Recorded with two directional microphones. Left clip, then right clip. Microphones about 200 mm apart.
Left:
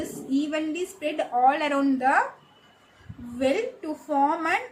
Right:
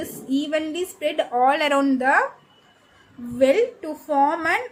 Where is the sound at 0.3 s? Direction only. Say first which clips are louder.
Right 3 dB; 50° right (ahead or behind).